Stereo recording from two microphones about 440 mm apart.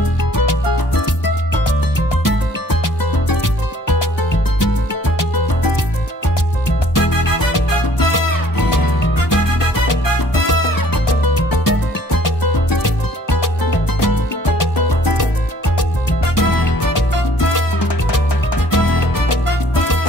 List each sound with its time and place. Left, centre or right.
0.2 s music: left
6.9 s music: left
10.4 s music: left
16.3 s music: left
17.6 s salsa music: left
18.7 s music: left